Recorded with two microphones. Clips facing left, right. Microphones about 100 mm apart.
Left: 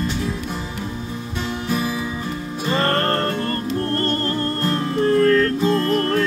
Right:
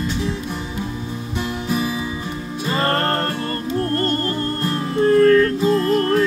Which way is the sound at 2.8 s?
20° right (ahead or behind).